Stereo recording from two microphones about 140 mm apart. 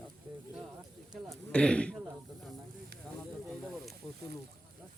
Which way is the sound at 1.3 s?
5° left (ahead or behind).